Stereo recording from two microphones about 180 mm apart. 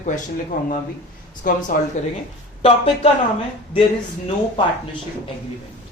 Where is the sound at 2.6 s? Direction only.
35° left (ahead or behind).